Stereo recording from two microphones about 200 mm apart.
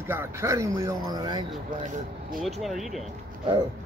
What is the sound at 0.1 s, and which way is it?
Speech, 15° right (ahead or behind).